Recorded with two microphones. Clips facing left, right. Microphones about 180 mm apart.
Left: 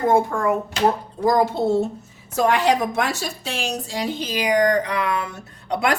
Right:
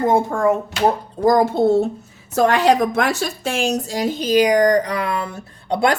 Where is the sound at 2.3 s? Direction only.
70° right (ahead or behind).